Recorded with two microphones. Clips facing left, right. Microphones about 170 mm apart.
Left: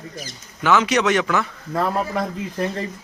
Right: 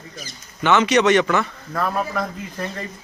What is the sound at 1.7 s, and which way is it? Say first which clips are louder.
A man's voice: left 3 dB; 25° left (ahead or behind).